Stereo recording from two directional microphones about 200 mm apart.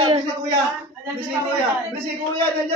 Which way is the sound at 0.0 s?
25° right (ahead or behind).